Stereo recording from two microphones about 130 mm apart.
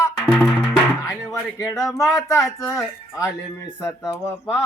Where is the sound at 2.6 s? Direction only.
25° left (ahead or behind).